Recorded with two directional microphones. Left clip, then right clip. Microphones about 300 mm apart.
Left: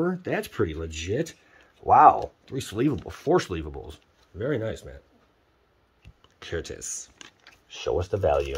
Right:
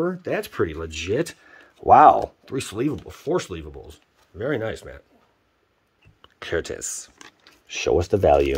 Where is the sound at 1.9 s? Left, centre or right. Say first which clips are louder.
Right 4 dB; right.